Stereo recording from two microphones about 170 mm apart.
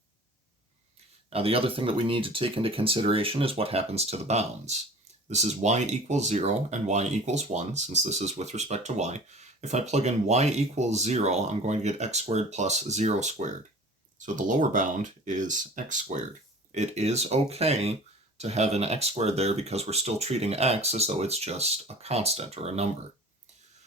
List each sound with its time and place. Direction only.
1.3 s speech: 35° right (ahead or behind)